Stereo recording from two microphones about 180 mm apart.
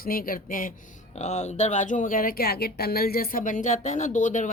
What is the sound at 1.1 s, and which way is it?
Speech, 40° left (ahead or behind).